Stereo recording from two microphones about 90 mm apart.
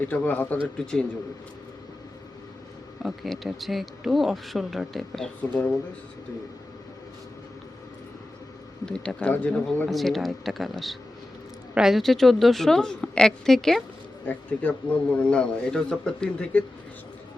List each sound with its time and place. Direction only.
0.0 s speech: 20° left (ahead or behind)
3.0 s speech: centre (ahead or behind)
5.4 s a man's voice: 15° left (ahead or behind)
8.9 s a man's voice: 10° left (ahead or behind)
9.9 s speech: centre (ahead or behind)
14.3 s a man's voice: 20° left (ahead or behind)